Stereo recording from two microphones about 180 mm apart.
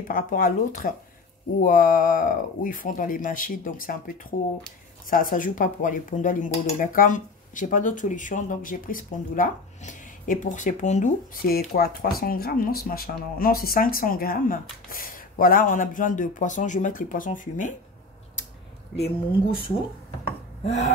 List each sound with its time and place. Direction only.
0.1 s speech: 50° left (ahead or behind)
5.1 s speech: 50° left (ahead or behind)
20.6 s a sound: 40° left (ahead or behind)